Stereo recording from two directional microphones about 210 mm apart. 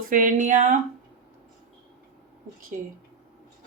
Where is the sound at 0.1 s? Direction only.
40° right (ahead or behind).